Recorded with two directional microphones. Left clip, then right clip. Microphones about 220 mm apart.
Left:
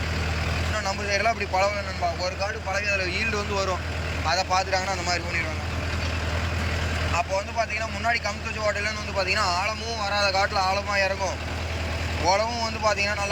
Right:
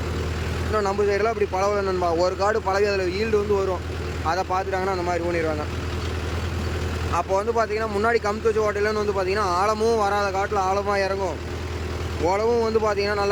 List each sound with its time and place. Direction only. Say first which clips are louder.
0.8 s speech: right 5 dB; 20° right (ahead or behind)
7.1 s speech: right 6 dB; 20° right (ahead or behind)